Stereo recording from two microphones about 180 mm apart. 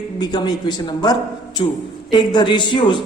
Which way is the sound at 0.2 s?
25° left (ahead or behind).